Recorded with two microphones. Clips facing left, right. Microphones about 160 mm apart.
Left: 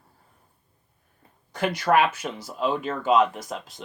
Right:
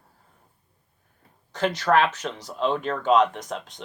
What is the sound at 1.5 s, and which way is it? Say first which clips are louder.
Speech: even; 10° left (ahead or behind).